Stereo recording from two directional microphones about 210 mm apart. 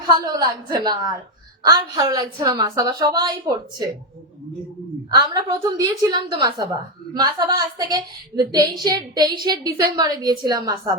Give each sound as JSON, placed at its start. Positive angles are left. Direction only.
{"t": 0.0, "sound": "a woman's voice", "side_deg": -20}
{"t": 5.1, "sound": "a woman's voice", "side_deg": -20}